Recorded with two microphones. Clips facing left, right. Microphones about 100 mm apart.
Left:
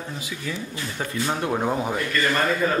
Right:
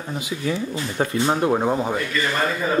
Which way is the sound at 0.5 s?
30° right (ahead or behind).